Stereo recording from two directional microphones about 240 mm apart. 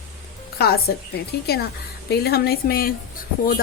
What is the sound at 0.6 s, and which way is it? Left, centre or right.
Speech, left.